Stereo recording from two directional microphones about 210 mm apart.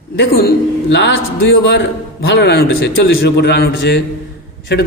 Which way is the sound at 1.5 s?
50° left (ahead or behind).